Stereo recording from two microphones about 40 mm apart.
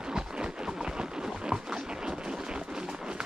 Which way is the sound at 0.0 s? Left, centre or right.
Right.